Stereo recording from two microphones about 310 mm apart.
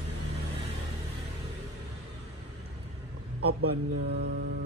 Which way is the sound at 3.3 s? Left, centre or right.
Right.